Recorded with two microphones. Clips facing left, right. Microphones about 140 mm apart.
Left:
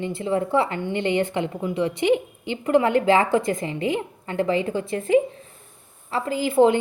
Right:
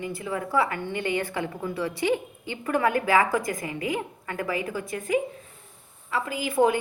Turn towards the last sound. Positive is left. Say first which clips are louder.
# left 5 dB
turn(degrees=25)  # may be behind; listen again after turning